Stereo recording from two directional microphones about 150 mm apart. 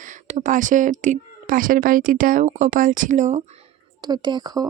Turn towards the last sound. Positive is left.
turn(degrees=-25)  # may be behind; listen again after turning